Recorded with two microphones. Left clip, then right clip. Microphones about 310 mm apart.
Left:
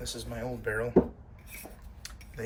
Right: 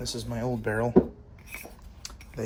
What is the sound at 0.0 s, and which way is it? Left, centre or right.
Speech, right.